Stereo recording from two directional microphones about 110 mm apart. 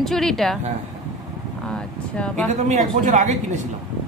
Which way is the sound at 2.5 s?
90° right.